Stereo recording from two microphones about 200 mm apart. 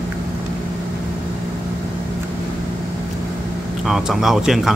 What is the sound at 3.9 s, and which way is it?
Speech, centre (ahead or behind).